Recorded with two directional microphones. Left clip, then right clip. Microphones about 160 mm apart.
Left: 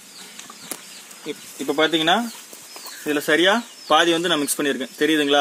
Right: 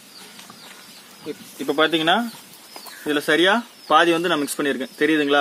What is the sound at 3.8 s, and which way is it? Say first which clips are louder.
Speech: right 1 dB; 5° left (ahead or behind).